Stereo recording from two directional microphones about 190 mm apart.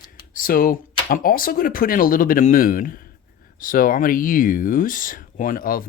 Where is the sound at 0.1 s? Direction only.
45° left (ahead or behind).